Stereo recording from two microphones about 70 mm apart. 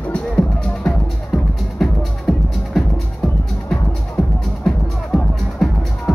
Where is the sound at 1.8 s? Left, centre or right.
Centre.